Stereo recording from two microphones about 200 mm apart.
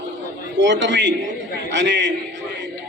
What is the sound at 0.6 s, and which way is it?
A man's voice, 65° right (ahead or behind).